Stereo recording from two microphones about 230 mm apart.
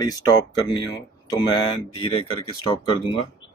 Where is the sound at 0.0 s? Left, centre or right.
Centre.